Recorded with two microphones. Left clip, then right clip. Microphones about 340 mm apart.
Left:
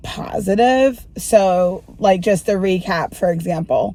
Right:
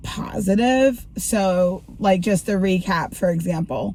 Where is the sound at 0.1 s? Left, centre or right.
Centre.